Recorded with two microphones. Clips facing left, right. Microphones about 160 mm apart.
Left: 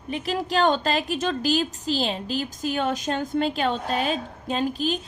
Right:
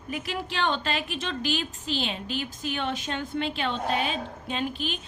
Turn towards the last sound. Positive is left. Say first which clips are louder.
# left 6 dB
turn(degrees=40)  # may be behind; listen again after turning